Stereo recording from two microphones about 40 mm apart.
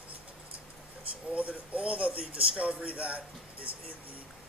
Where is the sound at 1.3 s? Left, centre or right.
Right.